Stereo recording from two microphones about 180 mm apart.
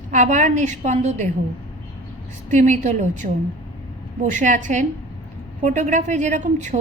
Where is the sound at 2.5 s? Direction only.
40° right (ahead or behind).